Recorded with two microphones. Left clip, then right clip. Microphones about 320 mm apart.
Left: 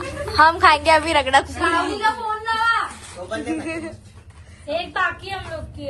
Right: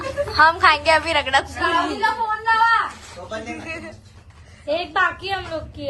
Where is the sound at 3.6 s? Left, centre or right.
Centre.